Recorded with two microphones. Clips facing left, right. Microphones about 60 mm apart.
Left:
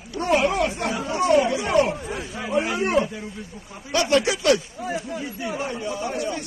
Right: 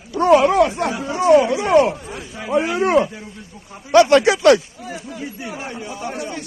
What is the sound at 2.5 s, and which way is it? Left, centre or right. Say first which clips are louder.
Speech: right 5 dB; right.